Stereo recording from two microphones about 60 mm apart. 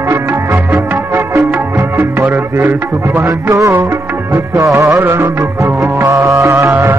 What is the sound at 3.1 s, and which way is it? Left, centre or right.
Music, right.